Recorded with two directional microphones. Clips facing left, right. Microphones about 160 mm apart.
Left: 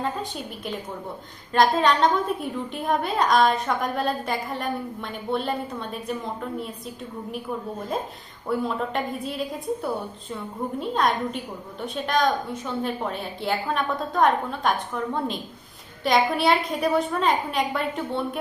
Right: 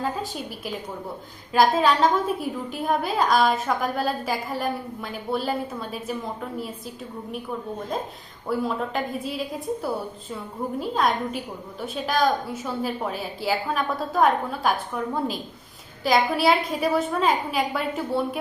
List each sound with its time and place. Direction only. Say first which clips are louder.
0.0 s a woman's voice: right 1 dB; 5° right (ahead or behind)
8.4 s a woman's voice: even; centre (ahead or behind)